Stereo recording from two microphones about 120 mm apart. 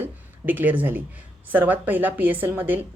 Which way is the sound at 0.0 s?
15° right (ahead or behind).